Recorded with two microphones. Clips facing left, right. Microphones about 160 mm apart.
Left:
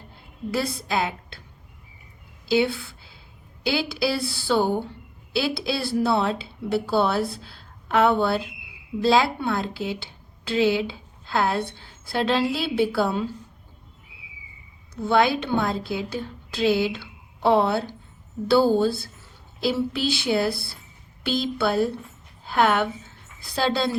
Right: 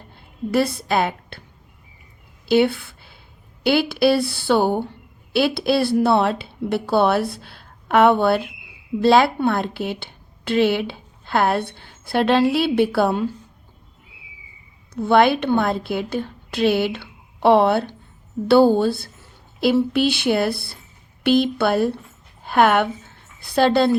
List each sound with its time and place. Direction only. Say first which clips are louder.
0.5 s a woman's voice: right 6 dB; 60° right (ahead or behind)
2.5 s a woman's voice: right 5 dB; 60° right (ahead or behind)
15.0 s a woman's voice: right 5 dB; 60° right (ahead or behind)